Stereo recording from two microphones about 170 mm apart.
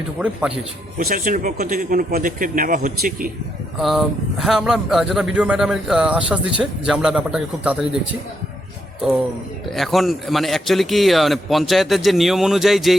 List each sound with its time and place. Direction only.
0.9 s speech: 55° right (ahead or behind)
3.8 s speech: centre (ahead or behind)
9.6 s speech: centre (ahead or behind)